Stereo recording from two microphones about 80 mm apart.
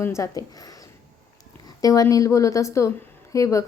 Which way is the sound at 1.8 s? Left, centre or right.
Left.